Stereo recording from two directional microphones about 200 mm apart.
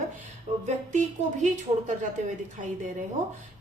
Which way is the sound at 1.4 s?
40° right (ahead or behind).